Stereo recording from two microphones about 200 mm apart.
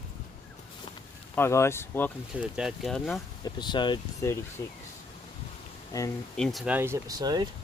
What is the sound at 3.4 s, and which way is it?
Speech, 20° left (ahead or behind).